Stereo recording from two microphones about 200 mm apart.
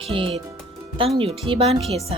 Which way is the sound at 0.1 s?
30° right (ahead or behind).